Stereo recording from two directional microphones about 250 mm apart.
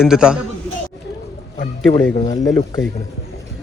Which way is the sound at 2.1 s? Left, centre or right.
Centre.